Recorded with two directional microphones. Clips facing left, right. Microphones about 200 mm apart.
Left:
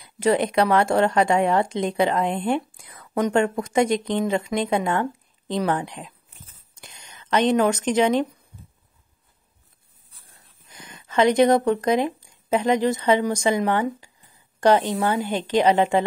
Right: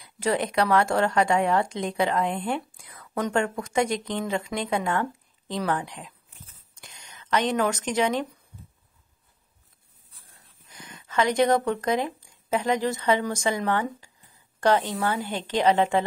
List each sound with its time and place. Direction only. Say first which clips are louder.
0.0 s a woman's voice: left 5 dB; 20° left (ahead or behind)
10.7 s a woman's voice: left 1 dB; 20° left (ahead or behind)